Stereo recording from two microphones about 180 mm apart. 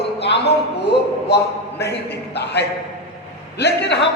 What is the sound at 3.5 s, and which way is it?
Speech, 70° left (ahead or behind).